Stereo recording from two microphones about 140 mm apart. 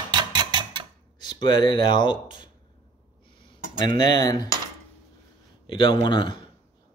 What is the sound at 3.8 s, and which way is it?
Speech, 30° left (ahead or behind).